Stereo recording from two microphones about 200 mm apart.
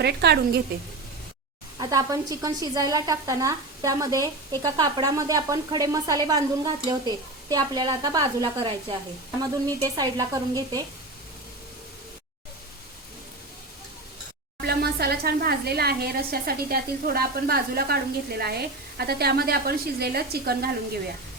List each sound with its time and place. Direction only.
0.0 s speech: 55° right (ahead or behind)
1.8 s a woman's voice: 15° right (ahead or behind)
14.6 s a woman's voice: 50° right (ahead or behind)